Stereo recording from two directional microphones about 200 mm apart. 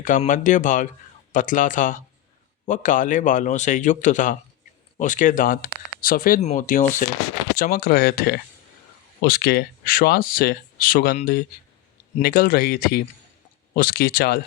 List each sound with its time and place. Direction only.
0.0 s a man's voice: 40° left (ahead or behind)